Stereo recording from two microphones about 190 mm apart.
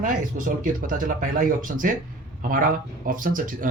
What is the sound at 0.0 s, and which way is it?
Speech, 45° right (ahead or behind).